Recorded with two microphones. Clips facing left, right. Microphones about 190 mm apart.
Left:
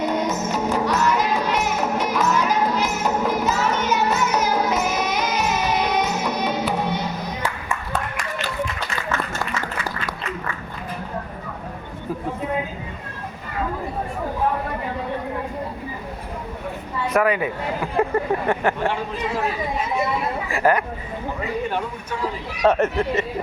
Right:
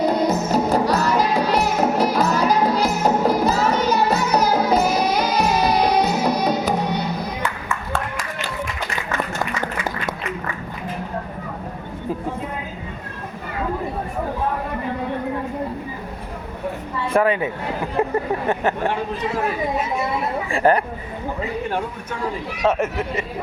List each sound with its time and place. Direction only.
0.0 s music: 35° right (ahead or behind)
9.6 s applause: 20° right (ahead or behind)
17.1 s a sound: 30° right (ahead or behind)
18.0 s vehicle: 20° right (ahead or behind)
18.6 s speech: 20° right (ahead or behind)
20.5 s speech: 30° right (ahead or behind)
22.6 s speech: 5° right (ahead or behind)